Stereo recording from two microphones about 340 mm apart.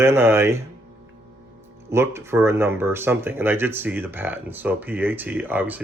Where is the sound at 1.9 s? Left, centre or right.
Centre.